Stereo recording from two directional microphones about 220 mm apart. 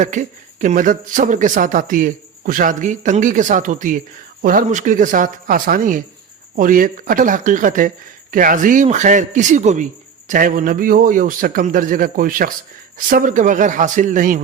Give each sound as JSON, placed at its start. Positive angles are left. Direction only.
{"t": 0.0, "sound": "speech", "side_deg": -35}